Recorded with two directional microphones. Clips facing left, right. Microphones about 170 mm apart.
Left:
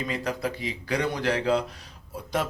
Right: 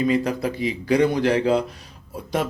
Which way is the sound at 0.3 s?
15° right (ahead or behind).